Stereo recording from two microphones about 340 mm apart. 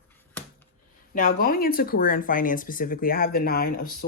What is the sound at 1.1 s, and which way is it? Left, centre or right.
A woman's voice, left.